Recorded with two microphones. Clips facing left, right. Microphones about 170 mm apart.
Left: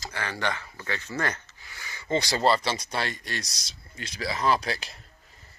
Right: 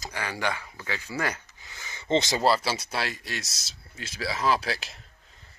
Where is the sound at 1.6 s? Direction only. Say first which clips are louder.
Even; 20° right (ahead or behind).